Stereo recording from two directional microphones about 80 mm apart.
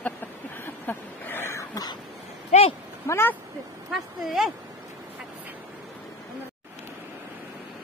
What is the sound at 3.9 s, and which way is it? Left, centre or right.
Speech, centre.